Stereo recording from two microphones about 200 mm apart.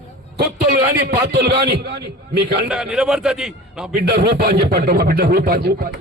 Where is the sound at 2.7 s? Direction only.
5° right (ahead or behind).